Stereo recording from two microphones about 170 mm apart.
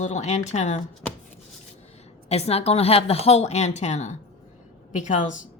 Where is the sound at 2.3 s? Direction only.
40° left (ahead or behind).